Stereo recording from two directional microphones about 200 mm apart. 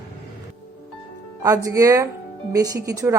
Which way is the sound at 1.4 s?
15° right (ahead or behind).